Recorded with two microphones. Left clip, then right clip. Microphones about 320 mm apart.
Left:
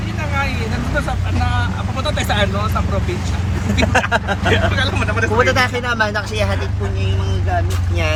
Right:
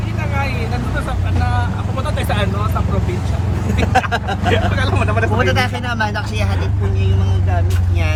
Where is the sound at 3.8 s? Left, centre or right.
Centre.